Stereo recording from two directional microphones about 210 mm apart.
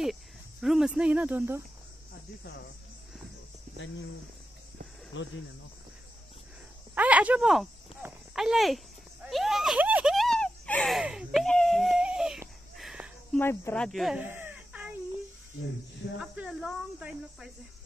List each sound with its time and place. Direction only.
0.0 s speech: centre (ahead or behind)
5.1 s speech: 60° left (ahead or behind)
7.0 s cricket: 5° right (ahead or behind)
13.4 s speech: 10° left (ahead or behind); by 14.9 s 5° right (ahead or behind)
16.2 s speech: 5° right (ahead or behind)